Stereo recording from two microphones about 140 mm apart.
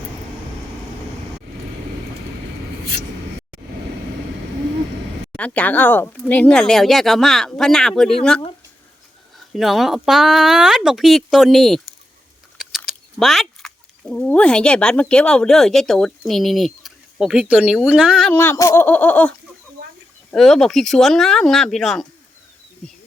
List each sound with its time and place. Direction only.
5.4 s speech: 10° left (ahead or behind)
9.5 s speech: centre (ahead or behind)
18.3 s speech: 15° left (ahead or behind)
18.9 s speech: 10° left (ahead or behind)
20.3 s speech: centre (ahead or behind)